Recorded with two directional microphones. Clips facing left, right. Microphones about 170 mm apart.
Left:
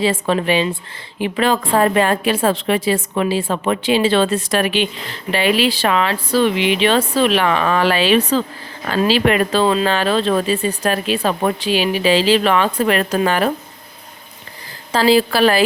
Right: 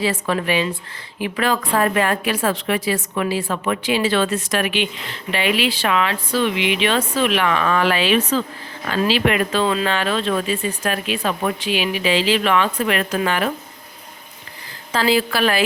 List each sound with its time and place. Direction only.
0.0 s a woman's voice: 25° left (ahead or behind)
14.9 s a woman's voice: 35° left (ahead or behind)